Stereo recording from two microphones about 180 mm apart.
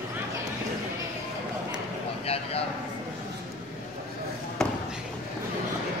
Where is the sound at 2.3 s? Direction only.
35° left (ahead or behind).